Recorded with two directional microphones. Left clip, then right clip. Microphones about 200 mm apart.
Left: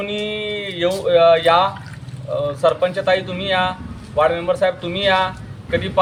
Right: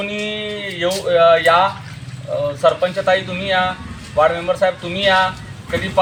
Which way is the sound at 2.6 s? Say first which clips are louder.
Right 1 dB; 20° left (ahead or behind).